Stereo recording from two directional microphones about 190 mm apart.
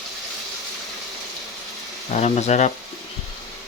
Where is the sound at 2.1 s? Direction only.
35° left (ahead or behind).